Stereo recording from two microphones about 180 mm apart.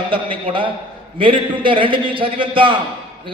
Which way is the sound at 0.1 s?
30° right (ahead or behind).